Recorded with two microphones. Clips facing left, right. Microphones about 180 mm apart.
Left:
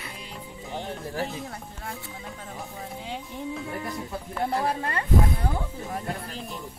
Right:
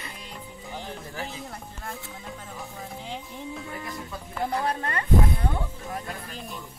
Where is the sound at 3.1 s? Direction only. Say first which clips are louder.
Left 5 dB; centre (ahead or behind).